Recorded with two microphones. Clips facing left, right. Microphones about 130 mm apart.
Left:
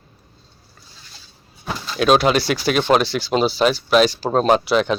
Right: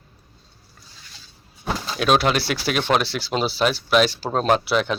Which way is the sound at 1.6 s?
5° right (ahead or behind).